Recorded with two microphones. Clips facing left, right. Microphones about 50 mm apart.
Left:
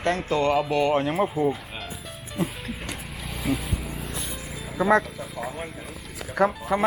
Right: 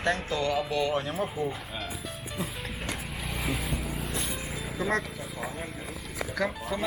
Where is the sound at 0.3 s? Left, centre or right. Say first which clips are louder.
Left 6 dB; left.